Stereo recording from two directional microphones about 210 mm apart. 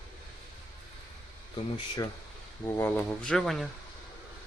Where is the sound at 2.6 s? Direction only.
5° left (ahead or behind).